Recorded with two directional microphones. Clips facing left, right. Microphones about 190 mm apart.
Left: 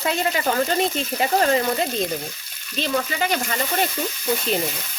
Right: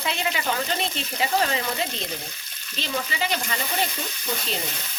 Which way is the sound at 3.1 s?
50° left (ahead or behind).